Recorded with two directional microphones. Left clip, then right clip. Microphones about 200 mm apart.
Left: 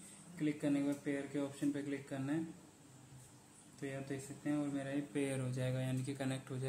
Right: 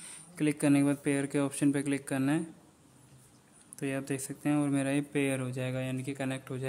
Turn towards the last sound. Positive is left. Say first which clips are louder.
# right 7 dB
turn(degrees=-25)  # may be behind; listen again after turning